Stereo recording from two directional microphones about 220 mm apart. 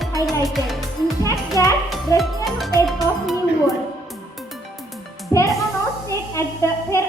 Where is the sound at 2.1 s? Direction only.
15° left (ahead or behind).